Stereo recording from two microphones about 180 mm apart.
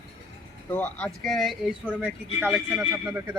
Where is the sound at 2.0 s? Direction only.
10° right (ahead or behind).